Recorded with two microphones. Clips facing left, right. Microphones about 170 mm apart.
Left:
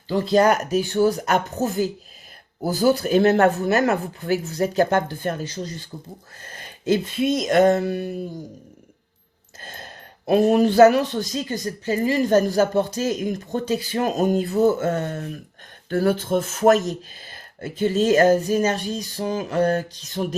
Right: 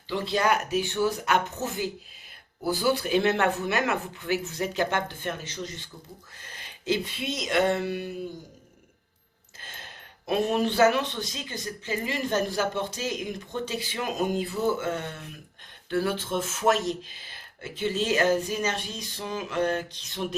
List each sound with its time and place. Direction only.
0.1 s speech: 40° left (ahead or behind)
6.4 s a sound: 45° left (ahead or behind)
9.6 s speech: 40° left (ahead or behind)